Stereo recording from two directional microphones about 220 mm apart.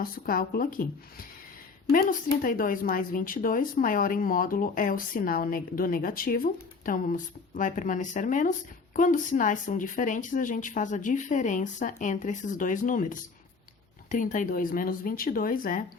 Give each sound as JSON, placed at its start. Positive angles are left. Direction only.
{"t": 0.0, "sound": "a woman's voice", "side_deg": 40}
{"t": 1.9, "sound": "a woman's voice", "side_deg": 40}